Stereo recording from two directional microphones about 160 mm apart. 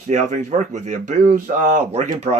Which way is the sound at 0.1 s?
50° right (ahead or behind).